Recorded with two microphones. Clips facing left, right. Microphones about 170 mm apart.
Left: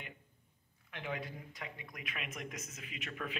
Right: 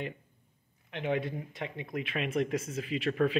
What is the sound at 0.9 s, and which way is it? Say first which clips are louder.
Speech: right 10 dB; 25° right (ahead or behind).